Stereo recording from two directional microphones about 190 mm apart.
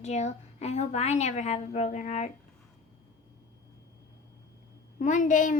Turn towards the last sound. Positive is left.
turn(degrees=40)  # may be behind; listen again after turning